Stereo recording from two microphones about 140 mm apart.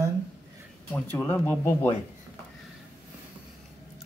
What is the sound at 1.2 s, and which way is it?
Speech, 15° left (ahead or behind).